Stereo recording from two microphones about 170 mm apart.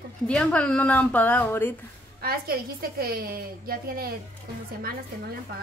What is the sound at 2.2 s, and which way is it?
Speech, 65° right (ahead or behind).